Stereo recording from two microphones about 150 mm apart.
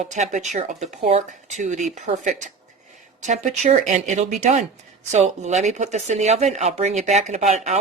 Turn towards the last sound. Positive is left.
turn(degrees=-50)  # may be behind; listen again after turning